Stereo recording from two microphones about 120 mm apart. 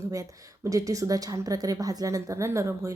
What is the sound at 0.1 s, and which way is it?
A woman's voice, 25° right (ahead or behind).